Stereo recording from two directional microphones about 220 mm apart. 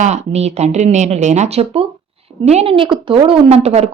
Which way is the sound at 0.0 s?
30° right (ahead or behind).